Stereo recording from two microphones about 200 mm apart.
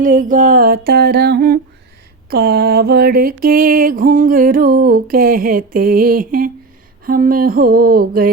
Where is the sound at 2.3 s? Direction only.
50° right (ahead or behind).